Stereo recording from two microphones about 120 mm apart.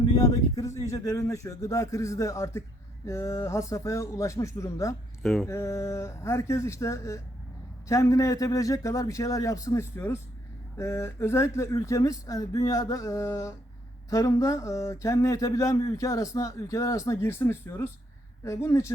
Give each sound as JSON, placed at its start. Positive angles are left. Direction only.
{"t": 0.1, "sound": "speech", "side_deg": 30}
{"t": 5.2, "sound": "mantra", "side_deg": 5}
{"t": 5.5, "sound": "speech", "side_deg": 25}